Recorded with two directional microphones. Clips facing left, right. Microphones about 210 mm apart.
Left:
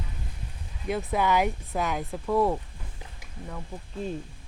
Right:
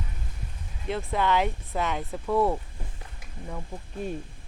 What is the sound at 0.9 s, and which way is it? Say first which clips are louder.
Speech: left 1 dB; 5° left (ahead or behind).